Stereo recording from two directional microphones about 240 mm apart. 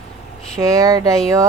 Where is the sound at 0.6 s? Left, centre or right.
Centre.